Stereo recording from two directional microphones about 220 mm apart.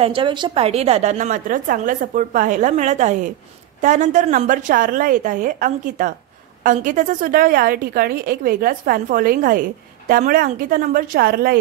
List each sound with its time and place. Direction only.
0.0 s a woman's voice: 25° right (ahead or behind); by 11.6 s 45° right (ahead or behind)